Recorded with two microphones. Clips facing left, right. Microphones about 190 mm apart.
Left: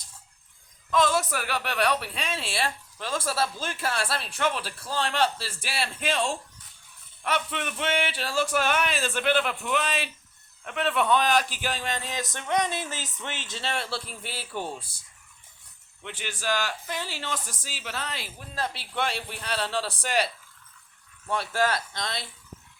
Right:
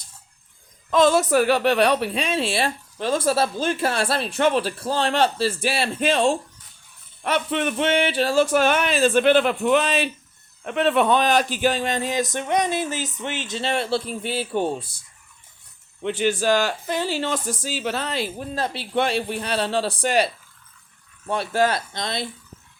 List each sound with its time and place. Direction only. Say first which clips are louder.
0.9 s speech: right 7 dB; 25° right (ahead or behind)
16.0 s speech: right 11 dB; 25° right (ahead or behind)